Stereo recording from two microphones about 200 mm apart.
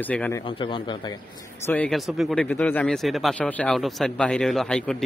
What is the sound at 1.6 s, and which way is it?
Speech, 5° left (ahead or behind).